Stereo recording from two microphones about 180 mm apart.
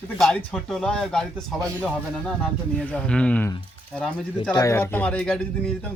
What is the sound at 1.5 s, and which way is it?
Speech, 20° right (ahead or behind).